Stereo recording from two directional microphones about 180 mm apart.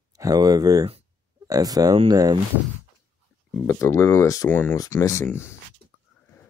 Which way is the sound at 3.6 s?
15° left (ahead or behind).